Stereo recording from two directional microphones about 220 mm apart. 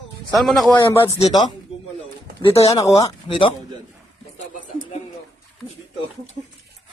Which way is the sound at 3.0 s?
25° left (ahead or behind).